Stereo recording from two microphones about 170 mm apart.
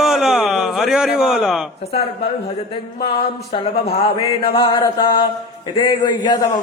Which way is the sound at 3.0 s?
30° left (ahead or behind).